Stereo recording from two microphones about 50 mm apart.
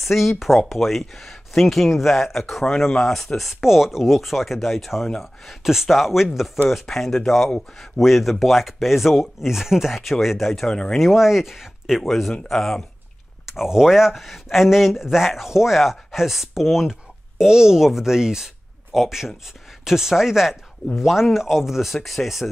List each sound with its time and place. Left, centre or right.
0.0 s speech: centre
3.6 s speech: centre
10.7 s speech: centre
11.0 s speech: centre
13.5 s speech: centre